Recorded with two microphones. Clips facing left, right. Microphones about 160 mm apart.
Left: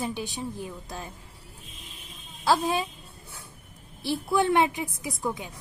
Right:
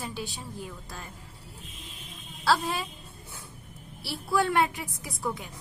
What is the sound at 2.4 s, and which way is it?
Speech, 15° left (ahead or behind).